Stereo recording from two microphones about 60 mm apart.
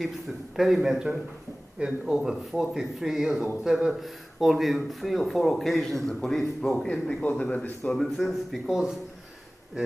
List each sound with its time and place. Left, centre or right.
0.6 s a man's voice: centre; by 7.9 s left
7.9 s a man's voice: centre
8.3 s speech: centre